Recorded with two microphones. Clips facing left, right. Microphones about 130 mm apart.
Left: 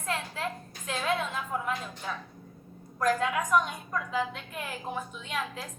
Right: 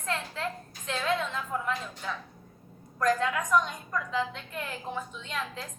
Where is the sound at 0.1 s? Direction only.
15° left (ahead or behind).